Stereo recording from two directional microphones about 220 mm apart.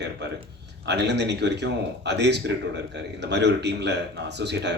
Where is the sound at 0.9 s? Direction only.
50° right (ahead or behind).